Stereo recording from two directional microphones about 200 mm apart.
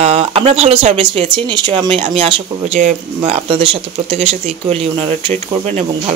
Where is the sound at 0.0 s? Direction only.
30° right (ahead or behind).